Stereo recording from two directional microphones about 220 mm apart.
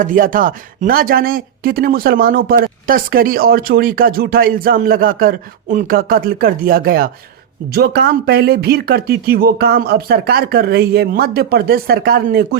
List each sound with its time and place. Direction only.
0.0 s speech: 40° right (ahead or behind)